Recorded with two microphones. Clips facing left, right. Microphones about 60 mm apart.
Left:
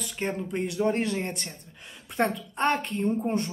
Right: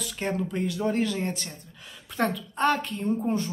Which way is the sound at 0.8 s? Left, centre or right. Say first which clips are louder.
Right 1 dB; left.